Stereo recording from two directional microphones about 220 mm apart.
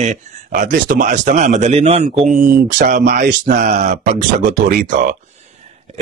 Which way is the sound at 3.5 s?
30° right (ahead or behind).